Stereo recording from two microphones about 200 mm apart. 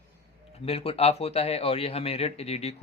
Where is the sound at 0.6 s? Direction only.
30° left (ahead or behind).